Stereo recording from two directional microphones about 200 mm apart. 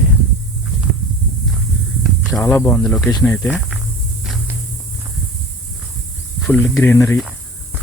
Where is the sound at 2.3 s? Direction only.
10° left (ahead or behind).